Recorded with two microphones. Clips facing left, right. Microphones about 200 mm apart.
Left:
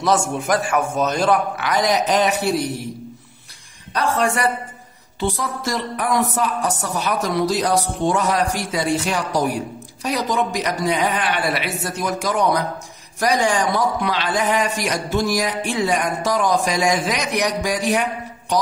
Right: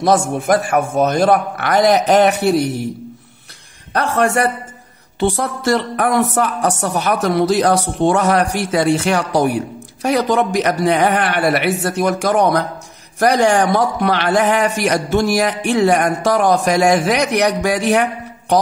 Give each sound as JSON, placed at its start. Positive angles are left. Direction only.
{"t": 0.0, "sound": "a man's voice", "side_deg": -55}
{"t": 3.9, "sound": "a man's voice", "side_deg": -65}